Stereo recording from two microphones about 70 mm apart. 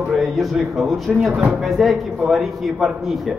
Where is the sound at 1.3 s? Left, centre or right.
Right.